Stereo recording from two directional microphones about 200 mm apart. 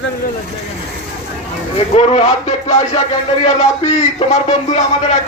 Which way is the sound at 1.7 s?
30° left (ahead or behind).